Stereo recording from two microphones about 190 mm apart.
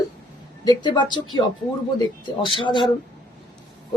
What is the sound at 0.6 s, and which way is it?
Speech, 25° left (ahead or behind).